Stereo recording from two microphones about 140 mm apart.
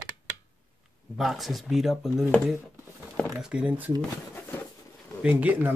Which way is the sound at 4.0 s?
15° left (ahead or behind).